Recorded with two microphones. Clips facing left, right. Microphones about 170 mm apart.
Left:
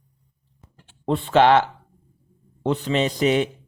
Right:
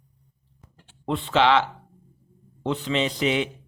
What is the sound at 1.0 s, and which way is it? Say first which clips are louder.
Speech: left 4 dB; 45° left (ahead or behind).